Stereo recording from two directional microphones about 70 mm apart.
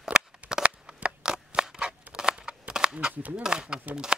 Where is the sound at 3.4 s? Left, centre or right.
Centre.